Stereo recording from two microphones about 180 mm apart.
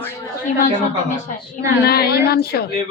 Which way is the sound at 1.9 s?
60° left (ahead or behind).